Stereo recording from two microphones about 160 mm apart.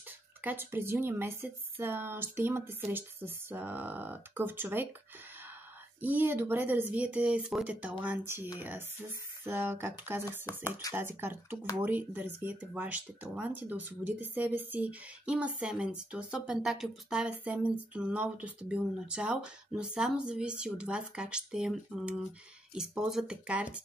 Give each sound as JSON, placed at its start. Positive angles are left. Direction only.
{"t": 0.4, "sound": "speech", "side_deg": -10}
{"t": 5.9, "sound": "speech", "side_deg": -10}
{"t": 10.4, "sound": "speech", "side_deg": 20}
{"t": 11.0, "sound": "speech", "side_deg": -15}